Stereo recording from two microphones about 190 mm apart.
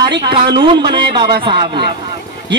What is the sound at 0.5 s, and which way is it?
A man's voice, 25° right (ahead or behind).